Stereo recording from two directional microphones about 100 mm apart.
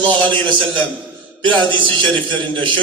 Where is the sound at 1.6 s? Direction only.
55° right (ahead or behind).